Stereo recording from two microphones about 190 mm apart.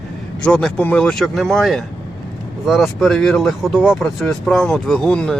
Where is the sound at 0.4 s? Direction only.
5° left (ahead or behind).